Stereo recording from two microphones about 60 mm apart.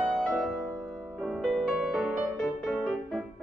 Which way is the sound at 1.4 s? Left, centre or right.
Centre.